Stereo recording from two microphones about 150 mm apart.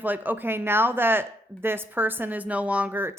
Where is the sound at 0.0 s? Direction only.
10° right (ahead or behind).